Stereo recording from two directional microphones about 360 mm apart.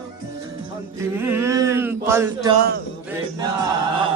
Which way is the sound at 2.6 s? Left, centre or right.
Right.